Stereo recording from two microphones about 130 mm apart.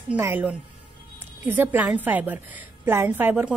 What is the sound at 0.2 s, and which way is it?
Speech, 15° right (ahead or behind).